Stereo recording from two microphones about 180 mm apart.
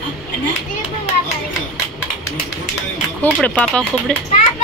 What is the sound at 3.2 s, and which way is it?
Speech, 5° left (ahead or behind).